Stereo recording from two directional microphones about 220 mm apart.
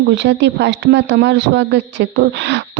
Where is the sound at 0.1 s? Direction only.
55° right (ahead or behind).